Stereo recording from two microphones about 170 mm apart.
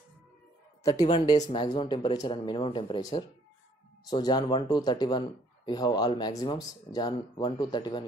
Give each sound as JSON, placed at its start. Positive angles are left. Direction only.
{"t": 0.8, "sound": "speech", "side_deg": 20}